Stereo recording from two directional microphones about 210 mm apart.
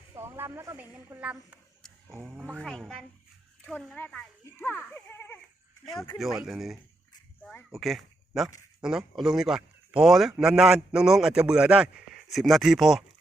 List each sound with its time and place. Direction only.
0.1 s a woman's voice: 10° right (ahead or behind); by 5.4 s 10° left (ahead or behind)
5.8 s a man's voice: centre (ahead or behind)